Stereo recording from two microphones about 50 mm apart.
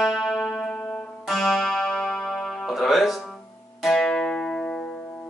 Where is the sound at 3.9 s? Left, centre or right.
Centre.